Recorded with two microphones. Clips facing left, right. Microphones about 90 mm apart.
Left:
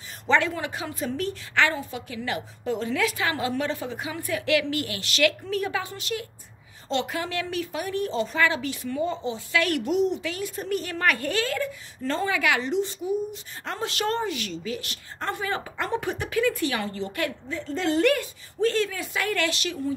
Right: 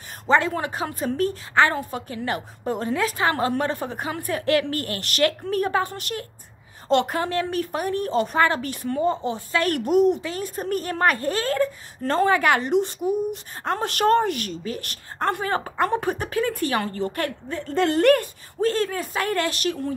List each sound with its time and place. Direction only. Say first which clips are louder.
0.3 s a woman's voice: right 3 dB; 40° right (ahead or behind)